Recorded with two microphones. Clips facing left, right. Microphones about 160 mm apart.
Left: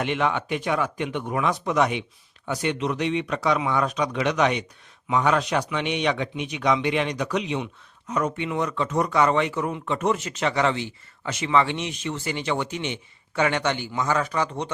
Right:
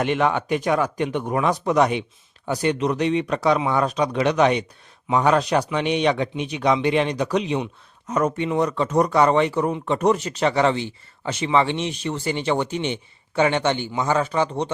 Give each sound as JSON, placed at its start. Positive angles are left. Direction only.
{"t": 0.0, "sound": "speech", "side_deg": -45}